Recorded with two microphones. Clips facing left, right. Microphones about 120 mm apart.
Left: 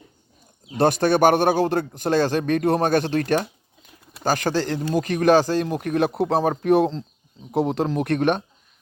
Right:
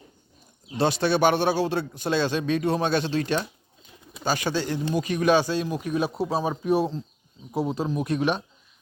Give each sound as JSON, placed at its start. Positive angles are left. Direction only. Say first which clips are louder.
{"t": 0.8, "sound": "speech", "louder": "left 4 dB", "side_deg": 50}